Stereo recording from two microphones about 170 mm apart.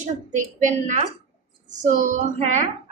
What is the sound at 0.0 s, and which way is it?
A woman's voice, 45° right (ahead or behind).